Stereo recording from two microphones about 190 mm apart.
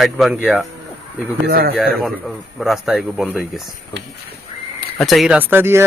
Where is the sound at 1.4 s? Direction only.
55° right (ahead or behind).